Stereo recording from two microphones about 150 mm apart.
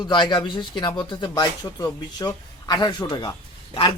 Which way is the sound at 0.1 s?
30° left (ahead or behind).